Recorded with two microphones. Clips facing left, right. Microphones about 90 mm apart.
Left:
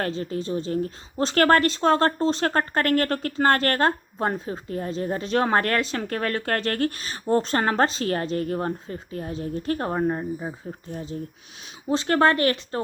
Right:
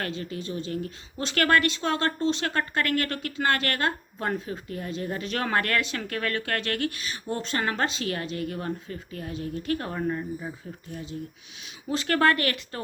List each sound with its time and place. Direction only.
0.0 s a woman's voice: 35° left (ahead or behind)
11.9 s speech: 25° left (ahead or behind)